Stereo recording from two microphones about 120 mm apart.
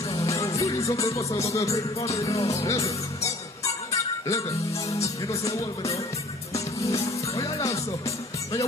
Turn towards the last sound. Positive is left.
turn(degrees=25)  # may be behind; listen again after turning